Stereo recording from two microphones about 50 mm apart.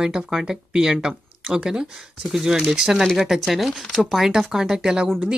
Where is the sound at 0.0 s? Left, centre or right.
Centre.